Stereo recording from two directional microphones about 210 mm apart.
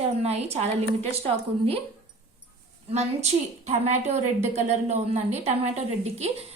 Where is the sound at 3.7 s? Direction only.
30° right (ahead or behind).